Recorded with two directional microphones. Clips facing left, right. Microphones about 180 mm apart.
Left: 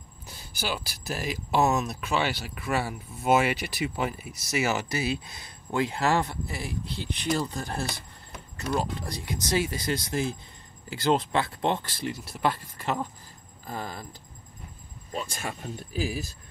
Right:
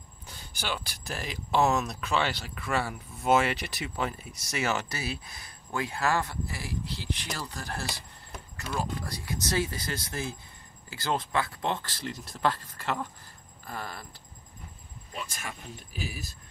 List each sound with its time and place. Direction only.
0.3 s speech: 5° left (ahead or behind)
5.0 s speech: 20° left (ahead or behind)
15.1 s speech: 30° left (ahead or behind)